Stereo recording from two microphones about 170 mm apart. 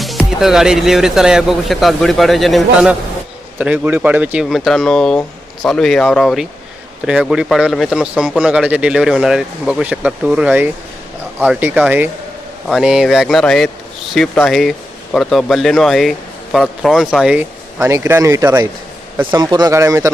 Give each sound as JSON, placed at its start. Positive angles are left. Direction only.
{"t": 0.0, "sound": "speech", "side_deg": 0}
{"t": 17.7, "sound": "a man's voice", "side_deg": -15}
{"t": 19.4, "sound": "speech", "side_deg": -25}